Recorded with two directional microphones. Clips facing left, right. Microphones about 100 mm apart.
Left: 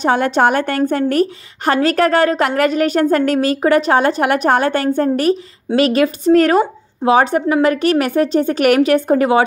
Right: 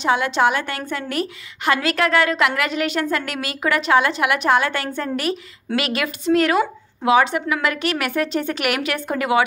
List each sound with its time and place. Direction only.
0.0 s a woman's voice: 45° left (ahead or behind)